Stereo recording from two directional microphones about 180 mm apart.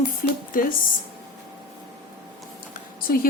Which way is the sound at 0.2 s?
55° left (ahead or behind).